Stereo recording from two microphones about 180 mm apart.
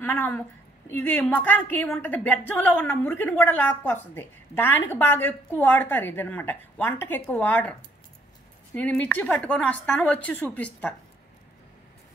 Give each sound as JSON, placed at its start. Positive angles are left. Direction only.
{"t": 0.0, "sound": "a woman's voice", "side_deg": 10}
{"t": 8.7, "sound": "a woman's voice", "side_deg": 10}